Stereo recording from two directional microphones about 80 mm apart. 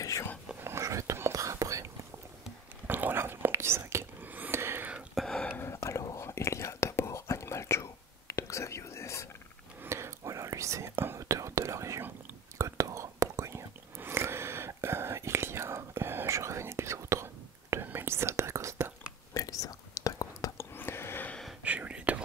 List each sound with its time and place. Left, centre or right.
0.6 s whispering: right
2.9 s whispering: right
5.1 s a sound: centre
5.5 s whispering: left
5.8 s whispering: left
9.8 s whispering: right
19.3 s whispering: left
20.5 s whispering: left
21.6 s whispering: centre